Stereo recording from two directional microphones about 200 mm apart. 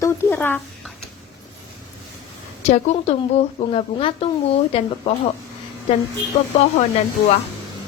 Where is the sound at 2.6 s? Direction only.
35° left (ahead or behind).